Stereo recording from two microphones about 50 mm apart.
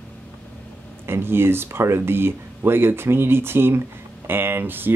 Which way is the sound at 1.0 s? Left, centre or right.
Right.